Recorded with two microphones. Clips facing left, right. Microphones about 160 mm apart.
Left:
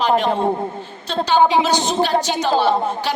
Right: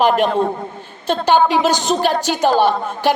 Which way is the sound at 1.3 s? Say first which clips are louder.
Right 1 dB; 50° right (ahead or behind).